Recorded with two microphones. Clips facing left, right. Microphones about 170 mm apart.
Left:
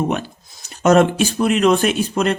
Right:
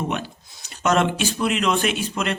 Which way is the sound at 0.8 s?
45° left (ahead or behind).